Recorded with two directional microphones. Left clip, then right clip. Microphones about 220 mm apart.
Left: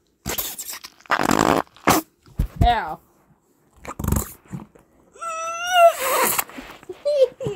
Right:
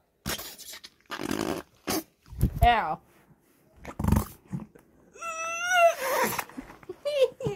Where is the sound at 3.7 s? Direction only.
15° left (ahead or behind).